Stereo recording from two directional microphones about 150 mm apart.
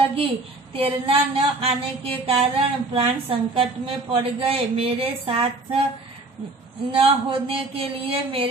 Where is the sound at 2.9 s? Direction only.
35° right (ahead or behind).